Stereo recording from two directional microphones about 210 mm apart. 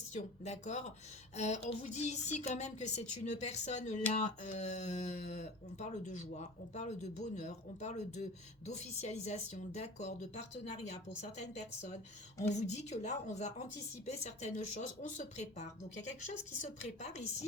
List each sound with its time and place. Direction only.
0.1 s speech: 35° left (ahead or behind)